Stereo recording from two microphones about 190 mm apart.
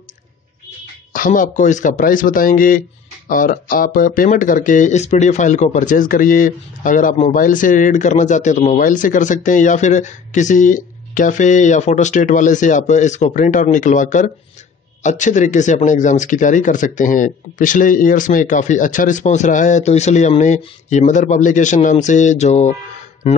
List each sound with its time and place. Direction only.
1.1 s speech: 45° left (ahead or behind)